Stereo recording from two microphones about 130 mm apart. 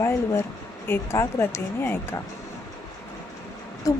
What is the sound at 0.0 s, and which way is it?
Speech, 20° left (ahead or behind).